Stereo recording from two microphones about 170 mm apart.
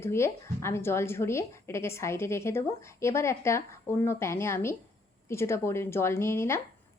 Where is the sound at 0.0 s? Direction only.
15° left (ahead or behind).